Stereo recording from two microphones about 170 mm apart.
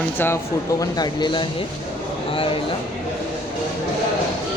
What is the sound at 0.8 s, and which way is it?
Speech, 25° left (ahead or behind).